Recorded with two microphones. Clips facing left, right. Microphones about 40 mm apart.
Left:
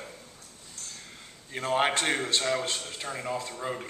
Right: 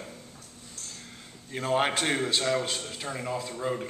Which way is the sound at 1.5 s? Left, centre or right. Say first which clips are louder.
Even; centre.